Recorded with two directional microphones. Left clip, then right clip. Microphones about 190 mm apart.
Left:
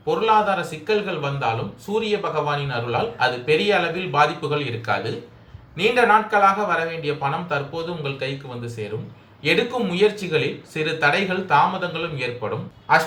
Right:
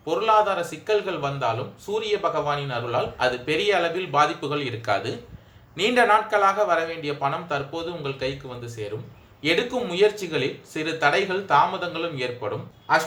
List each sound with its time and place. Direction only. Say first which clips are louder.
0.0 s speech: left 2 dB; 40° right (ahead or behind)